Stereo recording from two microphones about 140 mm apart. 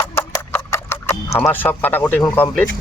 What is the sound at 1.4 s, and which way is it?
Speech, 15° left (ahead or behind).